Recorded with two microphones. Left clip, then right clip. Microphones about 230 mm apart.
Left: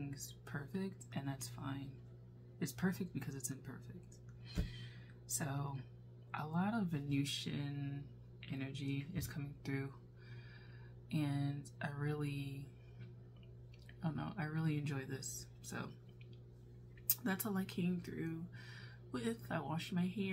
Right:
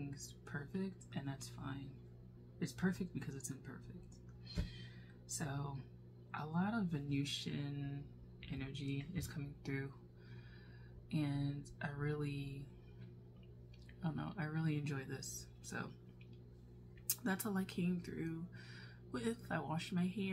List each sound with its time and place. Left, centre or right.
0.1 s music: centre
2.6 s speech: centre
4.5 s a sound: centre
5.3 s speech: centre
11.1 s speech: centre
14.0 s speech: centre
17.1 s speech: centre